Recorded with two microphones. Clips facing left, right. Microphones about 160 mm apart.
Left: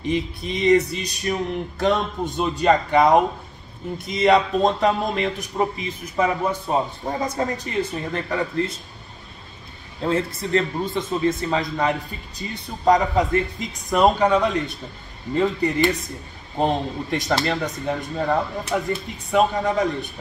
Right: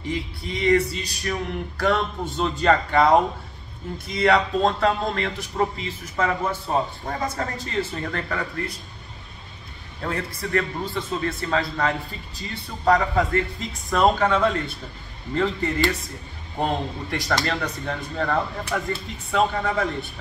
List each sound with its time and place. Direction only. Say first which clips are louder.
0.0 s speech: left 5 dB; 20° left (ahead or behind)
10.0 s speech: left 6 dB; 20° left (ahead or behind)